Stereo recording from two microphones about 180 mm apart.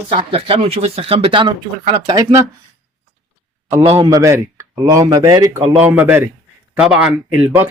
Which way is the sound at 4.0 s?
20° right (ahead or behind).